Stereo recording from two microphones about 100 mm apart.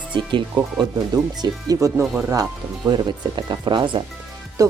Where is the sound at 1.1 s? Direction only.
40° right (ahead or behind).